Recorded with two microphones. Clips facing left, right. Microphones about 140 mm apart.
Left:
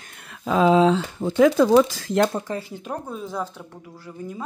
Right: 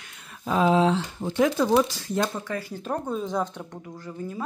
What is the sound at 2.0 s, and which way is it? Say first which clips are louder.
Speech: left 6 dB; 75° left (ahead or behind).